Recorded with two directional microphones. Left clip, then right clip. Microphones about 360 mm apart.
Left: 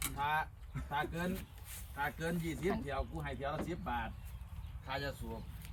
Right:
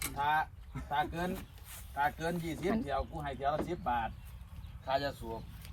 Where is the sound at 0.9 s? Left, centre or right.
Centre.